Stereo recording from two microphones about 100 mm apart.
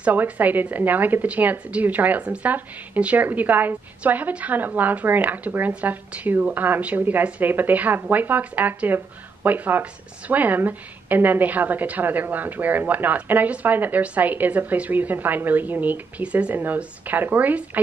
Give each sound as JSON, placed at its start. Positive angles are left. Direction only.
{"t": 0.0, "sound": "a woman's voice", "side_deg": -15}